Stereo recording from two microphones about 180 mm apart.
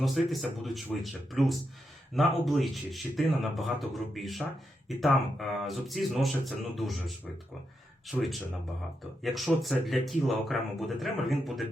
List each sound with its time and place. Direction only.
0.0 s speech: centre (ahead or behind)
8.0 s speech: centre (ahead or behind)